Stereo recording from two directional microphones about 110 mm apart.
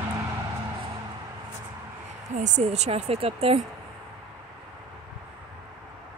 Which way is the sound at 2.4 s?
90° right.